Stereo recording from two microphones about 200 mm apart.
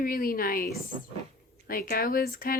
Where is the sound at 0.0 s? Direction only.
45° left (ahead or behind).